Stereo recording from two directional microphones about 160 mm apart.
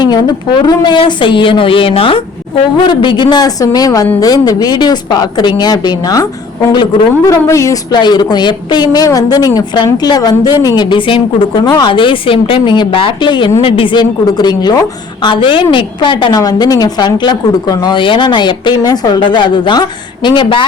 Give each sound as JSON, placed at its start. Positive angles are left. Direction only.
{"t": 0.0, "sound": "a woman's voice", "side_deg": 25}
{"t": 7.3, "sound": "a woman's voice", "side_deg": 20}